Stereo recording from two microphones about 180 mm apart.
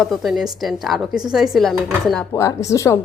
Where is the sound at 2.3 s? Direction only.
15° left (ahead or behind).